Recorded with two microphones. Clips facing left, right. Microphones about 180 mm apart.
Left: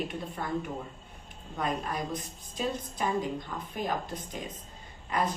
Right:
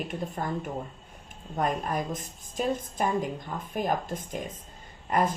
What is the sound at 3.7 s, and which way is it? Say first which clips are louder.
A woman's voice: right 4 dB; 50° right (ahead or behind).